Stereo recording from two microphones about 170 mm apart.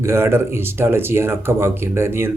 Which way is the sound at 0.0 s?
15° right (ahead or behind).